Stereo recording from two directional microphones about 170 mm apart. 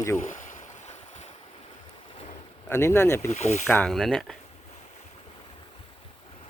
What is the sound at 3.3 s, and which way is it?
Speech, 40° left (ahead or behind).